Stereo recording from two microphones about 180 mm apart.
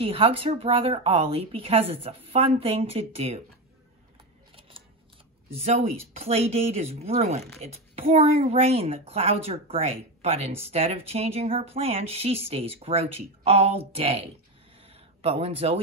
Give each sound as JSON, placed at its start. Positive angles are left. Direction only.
{"t": 0.0, "sound": "speech", "side_deg": -30}
{"t": 4.6, "sound": "scissors", "side_deg": -30}
{"t": 5.6, "sound": "speech", "side_deg": -35}
{"t": 14.8, "sound": "a sound", "side_deg": -35}